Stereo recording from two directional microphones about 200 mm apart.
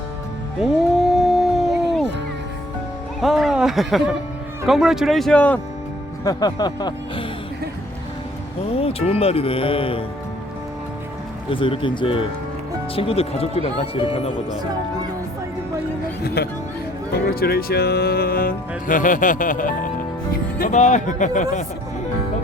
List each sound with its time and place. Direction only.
0.6 s howl: centre (ahead or behind)
3.2 s a sound: centre (ahead or behind)
4.6 s speech: centre (ahead or behind)
6.2 s speech: 20° left (ahead or behind)
8.7 s speech: 30° left (ahead or behind)
11.5 s speech: 25° left (ahead or behind)
16.2 s music: 55° left (ahead or behind)
18.9 s speech: 40° left (ahead or behind)